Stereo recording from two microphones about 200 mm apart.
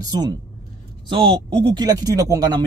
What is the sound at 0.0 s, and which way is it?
Speech, 20° right (ahead or behind).